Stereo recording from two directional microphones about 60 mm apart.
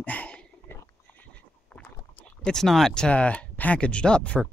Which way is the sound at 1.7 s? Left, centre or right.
Centre.